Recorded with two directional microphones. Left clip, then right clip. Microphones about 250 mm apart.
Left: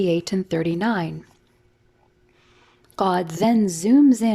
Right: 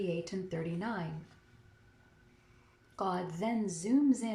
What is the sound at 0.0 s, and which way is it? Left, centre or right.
A woman's voice, left.